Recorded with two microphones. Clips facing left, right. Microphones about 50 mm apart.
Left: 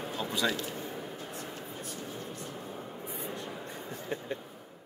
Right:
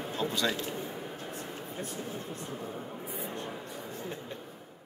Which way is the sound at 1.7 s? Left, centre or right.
Right.